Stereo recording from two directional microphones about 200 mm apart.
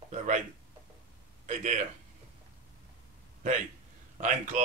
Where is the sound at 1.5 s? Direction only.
40° right (ahead or behind).